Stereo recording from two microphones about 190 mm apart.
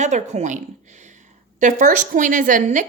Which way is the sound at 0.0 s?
40° right (ahead or behind).